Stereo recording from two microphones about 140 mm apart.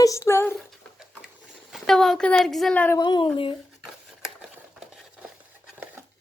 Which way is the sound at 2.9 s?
35° left (ahead or behind).